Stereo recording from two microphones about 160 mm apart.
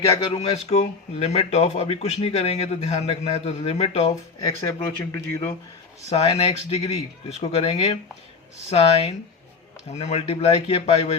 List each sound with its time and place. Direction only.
0.3 s speech: 35° left (ahead or behind)
4.4 s speech: 25° left (ahead or behind)
6.1 s speech: 40° left (ahead or behind)